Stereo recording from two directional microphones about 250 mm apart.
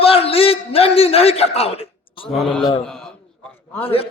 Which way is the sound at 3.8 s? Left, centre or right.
Left.